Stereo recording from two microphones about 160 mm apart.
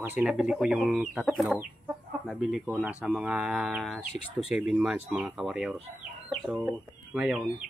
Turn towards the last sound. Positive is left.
turn(degrees=-5)  # may be behind; listen again after turning